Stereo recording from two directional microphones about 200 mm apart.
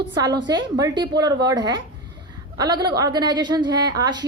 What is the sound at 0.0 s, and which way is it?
A woman's voice, 20° right (ahead or behind).